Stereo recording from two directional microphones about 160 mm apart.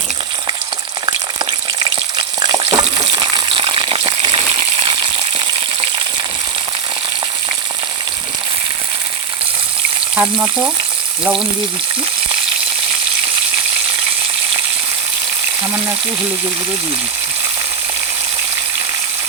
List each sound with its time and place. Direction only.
1.0 s frying: 30° right (ahead or behind)
3.0 s gush: 35° right (ahead or behind)
10.2 s frying: 5° right (ahead or behind)